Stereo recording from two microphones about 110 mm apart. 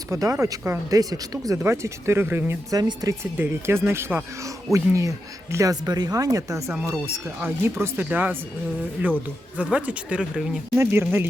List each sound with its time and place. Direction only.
0.1 s speech: 30° right (ahead or behind)
2.7 s speech: 35° right (ahead or behind)
3.3 s speech: 20° right (ahead or behind)
9.6 s speech: 10° right (ahead or behind)
10.8 s speech: 20° right (ahead or behind)